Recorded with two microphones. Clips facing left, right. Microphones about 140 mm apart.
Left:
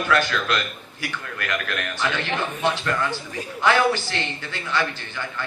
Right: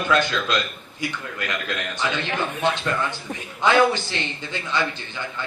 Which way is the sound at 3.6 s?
20° right (ahead or behind).